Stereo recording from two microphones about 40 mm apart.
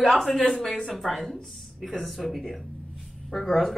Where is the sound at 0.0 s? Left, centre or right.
Centre.